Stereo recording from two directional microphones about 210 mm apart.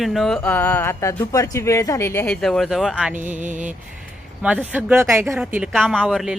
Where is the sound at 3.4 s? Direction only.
35° right (ahead or behind).